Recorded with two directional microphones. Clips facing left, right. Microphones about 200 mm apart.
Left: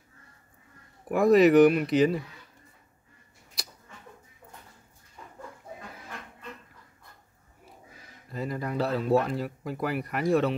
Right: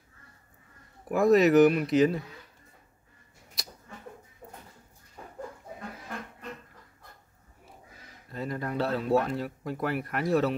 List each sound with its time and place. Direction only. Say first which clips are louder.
1.0 s speech: left 2 dB; centre (ahead or behind)
4.4 s a sound: right 4 dB; 45° right (ahead or behind)
8.3 s speech: left 1 dB; centre (ahead or behind)